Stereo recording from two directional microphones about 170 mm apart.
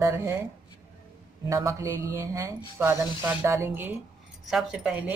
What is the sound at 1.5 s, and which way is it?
Speech, 20° right (ahead or behind).